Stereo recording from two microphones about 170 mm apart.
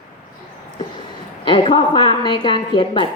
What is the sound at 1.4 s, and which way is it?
A woman's voice, 30° left (ahead or behind).